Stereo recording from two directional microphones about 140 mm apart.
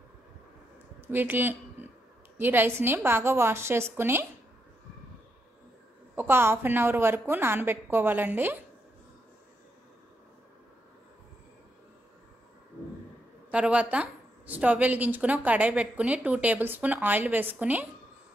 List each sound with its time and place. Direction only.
1.0 s a woman's voice: 15° right (ahead or behind)
6.1 s a woman's voice: 15° right (ahead or behind)
13.5 s a woman's voice: 10° right (ahead or behind)